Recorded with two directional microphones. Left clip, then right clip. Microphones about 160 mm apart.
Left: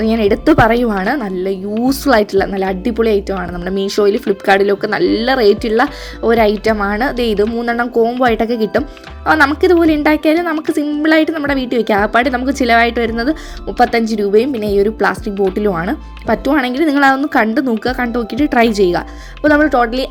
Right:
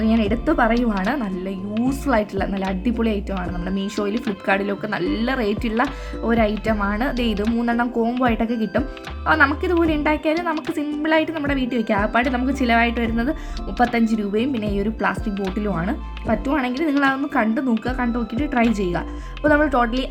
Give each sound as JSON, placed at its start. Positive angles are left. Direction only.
{"t": 0.0, "sound": "a woman's voice", "side_deg": 35}